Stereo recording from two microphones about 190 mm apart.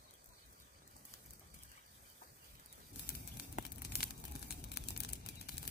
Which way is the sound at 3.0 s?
50° left (ahead or behind).